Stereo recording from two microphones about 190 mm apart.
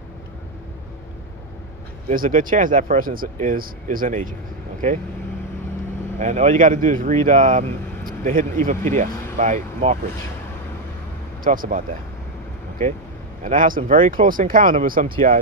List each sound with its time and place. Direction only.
2.0 s speech: 45° right (ahead or behind)
6.1 s speech: 35° right (ahead or behind)
11.4 s speech: 45° right (ahead or behind)
13.4 s speech: 45° right (ahead or behind)